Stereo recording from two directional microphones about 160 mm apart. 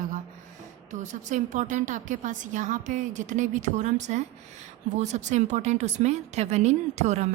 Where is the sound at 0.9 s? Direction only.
50° right (ahead or behind).